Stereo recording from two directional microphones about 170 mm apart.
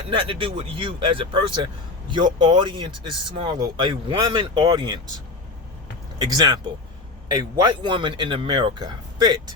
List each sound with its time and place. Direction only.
0.1 s speech: 30° right (ahead or behind)
6.1 s speech: 25° right (ahead or behind)